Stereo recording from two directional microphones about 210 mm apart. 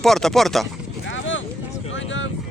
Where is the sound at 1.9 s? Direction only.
65° left (ahead or behind).